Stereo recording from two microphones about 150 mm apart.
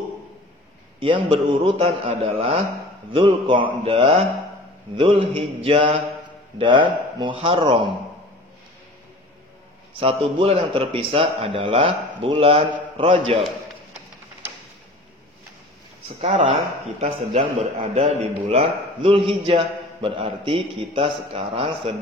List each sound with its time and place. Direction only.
1.0 s a man's voice: 35° right (ahead or behind)
9.9 s a man's voice: 40° right (ahead or behind)
16.1 s a man's voice: 50° right (ahead or behind)